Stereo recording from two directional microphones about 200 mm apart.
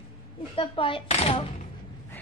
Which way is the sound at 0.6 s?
25° left (ahead or behind).